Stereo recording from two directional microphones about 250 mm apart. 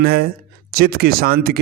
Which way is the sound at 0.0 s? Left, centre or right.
Right.